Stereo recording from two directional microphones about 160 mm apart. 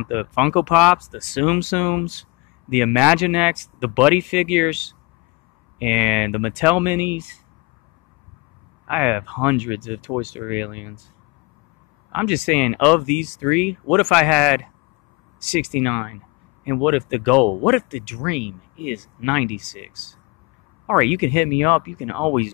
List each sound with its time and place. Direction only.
0.0 s speech: 5° right (ahead or behind)
1.6 s speech: 10° left (ahead or behind)
2.7 s speech: 5° right (ahead or behind)
8.8 s speech: 10° right (ahead or behind)
12.1 s speech: 10° right (ahead or behind)
12.4 s speech: 5° left (ahead or behind)
21.3 s speech: 15° left (ahead or behind)
21.9 s speech: 5° right (ahead or behind)